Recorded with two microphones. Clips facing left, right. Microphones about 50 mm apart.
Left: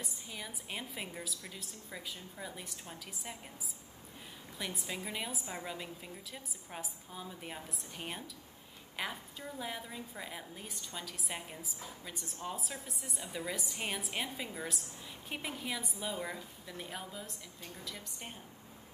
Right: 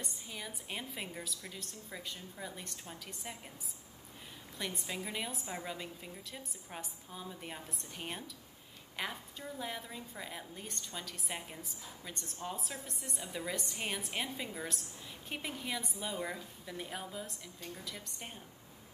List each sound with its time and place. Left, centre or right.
0.0 s a woman's voice: centre
4.6 s a woman's voice: centre